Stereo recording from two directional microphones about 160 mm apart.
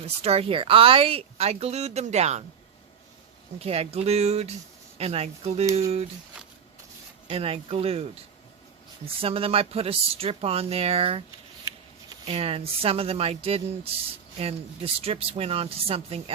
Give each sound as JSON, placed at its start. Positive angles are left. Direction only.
{"t": 0.0, "sound": "speech", "side_deg": -40}
{"t": 3.6, "sound": "speech", "side_deg": -40}
{"t": 7.3, "sound": "speech", "side_deg": -40}
{"t": 9.0, "sound": "speech", "side_deg": -35}
{"t": 12.2, "sound": "speech", "side_deg": -40}